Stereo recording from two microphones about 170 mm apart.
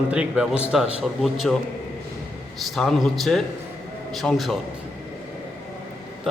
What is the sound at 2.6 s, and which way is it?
A man's voice, centre (ahead or behind).